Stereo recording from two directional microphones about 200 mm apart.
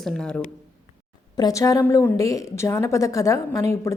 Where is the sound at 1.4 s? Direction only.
15° left (ahead or behind).